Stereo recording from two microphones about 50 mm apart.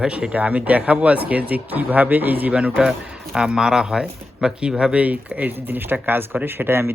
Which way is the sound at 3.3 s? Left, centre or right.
Centre.